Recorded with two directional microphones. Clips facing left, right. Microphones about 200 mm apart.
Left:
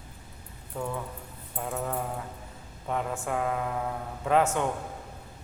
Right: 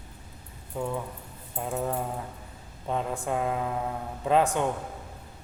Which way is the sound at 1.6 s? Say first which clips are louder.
Right 2 dB; 20° right (ahead or behind).